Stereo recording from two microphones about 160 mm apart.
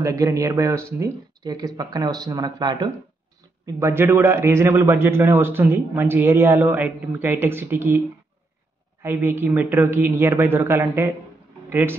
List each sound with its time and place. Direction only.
0.0 s speech: 20° right (ahead or behind)
3.6 s a man's voice: 15° right (ahead or behind)
9.0 s a man's voice: 15° right (ahead or behind)